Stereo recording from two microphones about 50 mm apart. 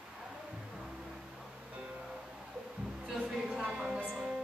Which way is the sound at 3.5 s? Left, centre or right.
Right.